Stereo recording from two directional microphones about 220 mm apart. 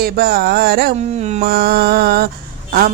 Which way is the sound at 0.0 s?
45° right (ahead or behind).